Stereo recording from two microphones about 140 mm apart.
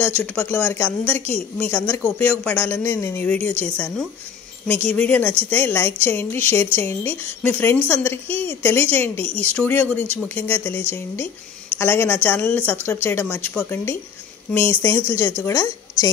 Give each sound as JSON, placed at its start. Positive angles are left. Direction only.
{"t": 0.0, "sound": "a woman's voice", "side_deg": 15}